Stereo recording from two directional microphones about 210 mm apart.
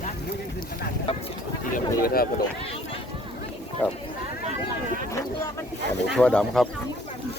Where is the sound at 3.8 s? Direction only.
10° left (ahead or behind).